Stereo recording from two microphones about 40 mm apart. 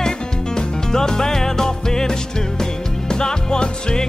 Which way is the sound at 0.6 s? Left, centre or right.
Centre.